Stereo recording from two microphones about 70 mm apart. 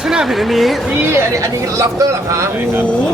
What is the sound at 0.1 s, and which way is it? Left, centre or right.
Speech, centre.